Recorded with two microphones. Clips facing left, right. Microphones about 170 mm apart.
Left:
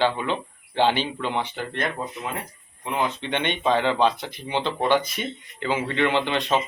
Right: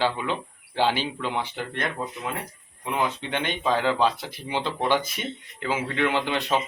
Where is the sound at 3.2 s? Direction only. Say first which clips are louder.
Left 2 dB; 5° right (ahead or behind).